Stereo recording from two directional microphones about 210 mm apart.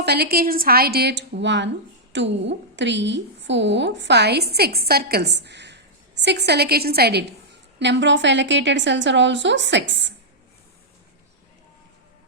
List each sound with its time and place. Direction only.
0.0 s a woman's voice: 50° right (ahead or behind)